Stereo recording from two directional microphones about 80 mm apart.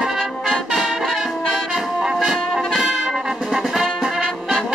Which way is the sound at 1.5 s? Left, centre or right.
Centre.